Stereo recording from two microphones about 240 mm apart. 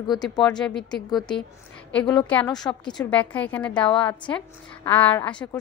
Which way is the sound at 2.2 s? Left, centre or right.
Centre.